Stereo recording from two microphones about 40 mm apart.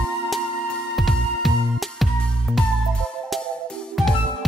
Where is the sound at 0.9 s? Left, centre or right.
Centre.